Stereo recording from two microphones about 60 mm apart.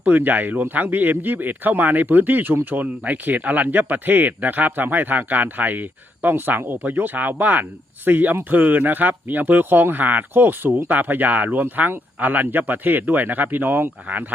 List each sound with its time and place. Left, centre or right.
0.2 s speech: right